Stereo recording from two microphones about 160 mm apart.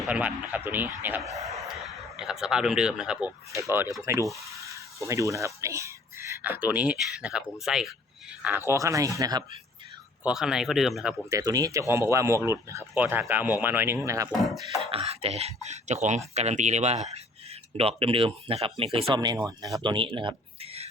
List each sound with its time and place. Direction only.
0.0 s speech: 10° right (ahead or behind)
10.2 s speech: 5° right (ahead or behind)
11.3 s speech: 20° right (ahead or behind)
14.3 s speech: centre (ahead or behind)
14.8 s speech: 40° right (ahead or behind)
19.1 s speech: 25° right (ahead or behind)